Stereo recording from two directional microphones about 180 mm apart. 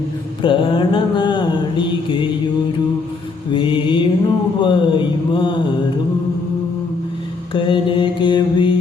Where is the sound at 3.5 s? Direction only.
30° left (ahead or behind).